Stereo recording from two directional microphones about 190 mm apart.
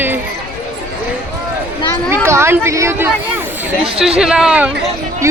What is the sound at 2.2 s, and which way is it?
Speech, 15° right (ahead or behind).